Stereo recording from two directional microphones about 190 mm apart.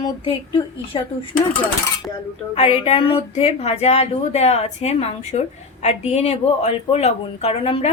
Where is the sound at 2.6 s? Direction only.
30° left (ahead or behind).